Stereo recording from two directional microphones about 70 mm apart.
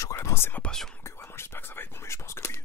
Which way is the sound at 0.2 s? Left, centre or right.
Left.